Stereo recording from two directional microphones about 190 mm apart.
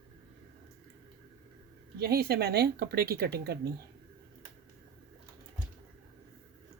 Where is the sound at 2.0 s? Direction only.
55° right (ahead or behind).